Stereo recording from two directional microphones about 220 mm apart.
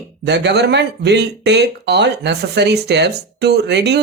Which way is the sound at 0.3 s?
50° right (ahead or behind).